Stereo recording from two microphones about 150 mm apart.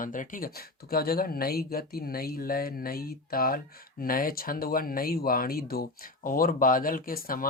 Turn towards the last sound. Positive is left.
turn(degrees=75)  # may be behind; listen again after turning